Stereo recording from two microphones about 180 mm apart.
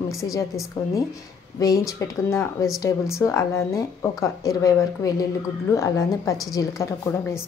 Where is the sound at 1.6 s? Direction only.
20° left (ahead or behind).